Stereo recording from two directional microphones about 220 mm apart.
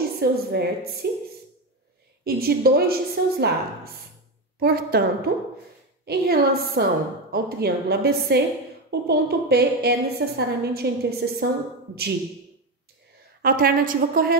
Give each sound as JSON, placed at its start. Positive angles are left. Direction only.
{"t": 0.2, "sound": "a woman's voice", "side_deg": -45}
{"t": 2.2, "sound": "a woman's voice", "side_deg": -45}
{"t": 13.4, "sound": "a woman's voice", "side_deg": -40}